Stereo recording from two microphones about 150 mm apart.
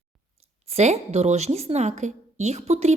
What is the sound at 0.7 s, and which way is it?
Speech, 45° right (ahead or behind).